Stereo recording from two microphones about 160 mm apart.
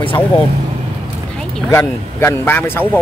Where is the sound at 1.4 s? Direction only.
5° left (ahead or behind).